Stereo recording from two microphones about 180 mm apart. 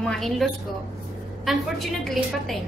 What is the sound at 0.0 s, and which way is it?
A woman's voice, centre (ahead or behind).